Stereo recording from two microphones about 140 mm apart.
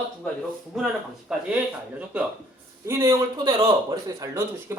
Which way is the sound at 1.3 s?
5° right (ahead or behind).